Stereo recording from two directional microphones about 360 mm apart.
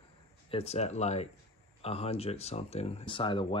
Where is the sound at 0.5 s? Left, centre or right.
Centre.